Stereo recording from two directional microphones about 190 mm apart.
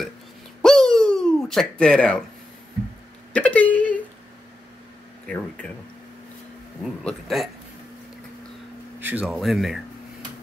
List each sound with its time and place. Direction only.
0.6 s a sound: 5° left (ahead or behind)
3.3 s speech: 10° left (ahead or behind)
5.2 s speech: 5° left (ahead or behind)
6.8 s speech: centre (ahead or behind)
9.0 s speech: 5° right (ahead or behind)